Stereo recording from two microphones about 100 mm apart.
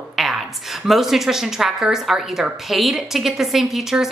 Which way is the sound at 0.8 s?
Centre (ahead or behind).